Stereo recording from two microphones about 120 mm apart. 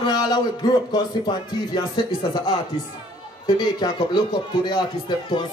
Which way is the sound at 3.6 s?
35° left (ahead or behind).